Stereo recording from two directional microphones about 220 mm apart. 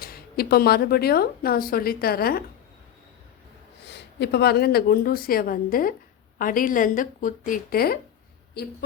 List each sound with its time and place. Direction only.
0.0 s a woman's voice: 45° left (ahead or behind)
3.8 s a woman's voice: 50° left (ahead or behind)